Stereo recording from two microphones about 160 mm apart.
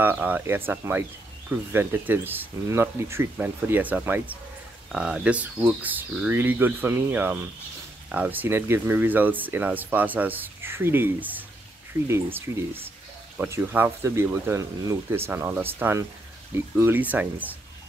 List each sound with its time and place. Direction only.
0.0 s speech: 10° right (ahead or behind)